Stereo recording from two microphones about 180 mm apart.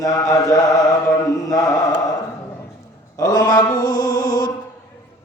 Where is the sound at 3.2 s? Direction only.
20° left (ahead or behind).